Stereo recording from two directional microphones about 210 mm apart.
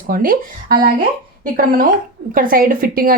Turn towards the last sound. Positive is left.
turn(degrees=-45)  # may be behind; listen again after turning